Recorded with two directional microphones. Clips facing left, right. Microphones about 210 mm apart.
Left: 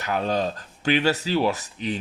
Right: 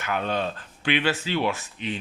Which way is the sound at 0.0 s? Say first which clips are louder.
Left 3 dB; 35° left (ahead or behind).